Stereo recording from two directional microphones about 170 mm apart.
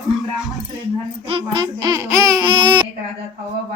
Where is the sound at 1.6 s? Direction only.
20° right (ahead or behind).